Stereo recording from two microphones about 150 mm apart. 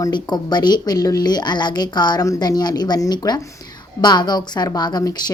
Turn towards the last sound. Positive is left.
turn(degrees=25)  # may be behind; listen again after turning